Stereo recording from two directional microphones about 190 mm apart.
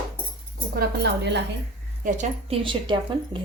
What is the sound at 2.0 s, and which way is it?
Speech, 40° right (ahead or behind).